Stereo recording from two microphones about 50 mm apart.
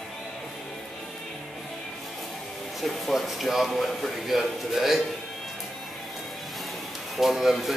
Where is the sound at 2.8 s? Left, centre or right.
Centre.